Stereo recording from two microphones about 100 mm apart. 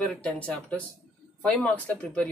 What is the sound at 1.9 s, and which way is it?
Speech, 5° left (ahead or behind).